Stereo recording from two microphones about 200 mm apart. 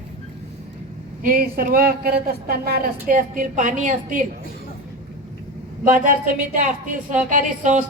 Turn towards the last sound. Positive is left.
turn(degrees=-40)  # may be behind; listen again after turning